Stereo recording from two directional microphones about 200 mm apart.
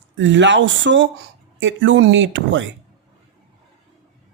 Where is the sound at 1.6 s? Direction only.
70° right (ahead or behind).